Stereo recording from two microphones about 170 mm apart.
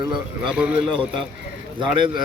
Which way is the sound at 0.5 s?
5° right (ahead or behind).